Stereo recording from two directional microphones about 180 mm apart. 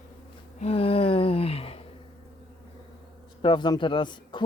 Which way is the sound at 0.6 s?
35° left (ahead or behind).